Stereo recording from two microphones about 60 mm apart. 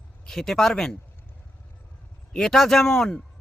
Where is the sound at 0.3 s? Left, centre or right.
Centre.